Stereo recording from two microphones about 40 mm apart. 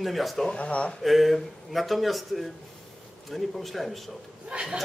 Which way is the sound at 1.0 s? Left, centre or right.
Centre.